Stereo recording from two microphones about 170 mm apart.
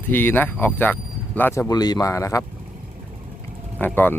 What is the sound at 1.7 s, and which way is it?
Speech, 25° left (ahead or behind).